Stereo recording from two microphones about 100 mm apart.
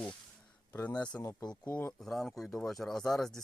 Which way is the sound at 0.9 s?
45° left (ahead or behind).